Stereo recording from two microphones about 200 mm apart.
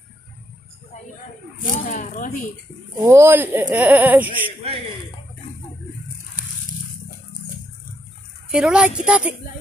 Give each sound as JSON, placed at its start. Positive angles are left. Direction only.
{"t": 1.6, "sound": "speech", "side_deg": 40}
{"t": 3.0, "sound": "speech", "side_deg": -10}
{"t": 8.5, "sound": "a woman's voice", "side_deg": -5}